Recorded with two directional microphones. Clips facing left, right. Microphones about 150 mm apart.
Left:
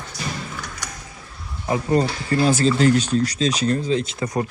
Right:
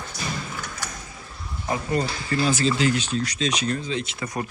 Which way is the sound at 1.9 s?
35° left (ahead or behind).